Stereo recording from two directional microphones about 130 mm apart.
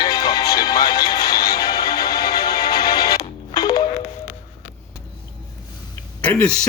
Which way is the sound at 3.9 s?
70° left (ahead or behind).